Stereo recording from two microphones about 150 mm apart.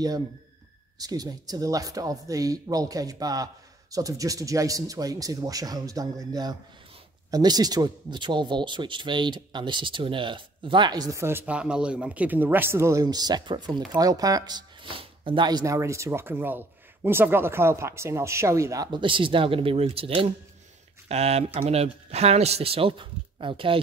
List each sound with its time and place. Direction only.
1.0 s speech: 25° right (ahead or behind)